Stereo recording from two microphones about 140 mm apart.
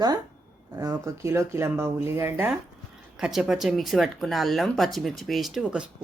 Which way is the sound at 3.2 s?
5° right (ahead or behind).